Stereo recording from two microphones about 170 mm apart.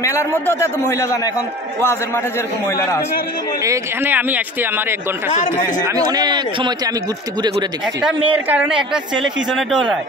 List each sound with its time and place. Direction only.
0.0 s a man's voice: 15° left (ahead or behind)
3.6 s speech: 15° right (ahead or behind)
5.9 s speech: 20° right (ahead or behind)
8.3 s speech: 10° right (ahead or behind)